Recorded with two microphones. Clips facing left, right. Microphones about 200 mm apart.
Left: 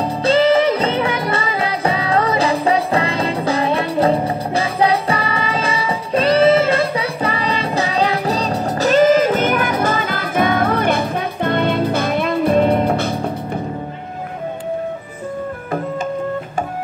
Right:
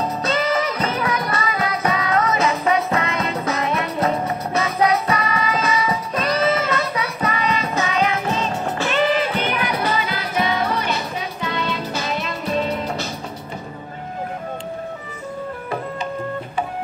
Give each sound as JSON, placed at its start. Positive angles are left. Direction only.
{"t": 0.0, "sound": "music", "side_deg": 30}